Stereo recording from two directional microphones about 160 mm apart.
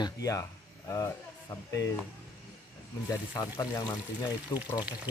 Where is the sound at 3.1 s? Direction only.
25° left (ahead or behind).